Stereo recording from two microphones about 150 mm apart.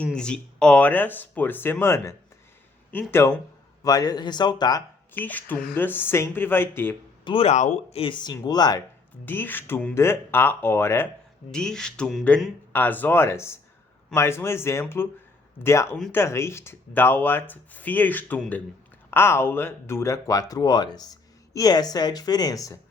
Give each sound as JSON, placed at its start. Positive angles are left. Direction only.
{"t": 0.0, "sound": "speech", "side_deg": 5}
{"t": 5.1, "sound": "speech", "side_deg": 10}
{"t": 7.3, "sound": "speech", "side_deg": 40}
{"t": 9.2, "sound": "speech", "side_deg": 15}
{"t": 11.5, "sound": "speech", "side_deg": 5}